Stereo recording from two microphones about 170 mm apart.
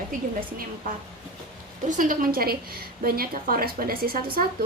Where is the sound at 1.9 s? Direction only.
50° right (ahead or behind).